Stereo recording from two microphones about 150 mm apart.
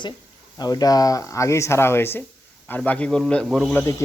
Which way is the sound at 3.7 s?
15° left (ahead or behind).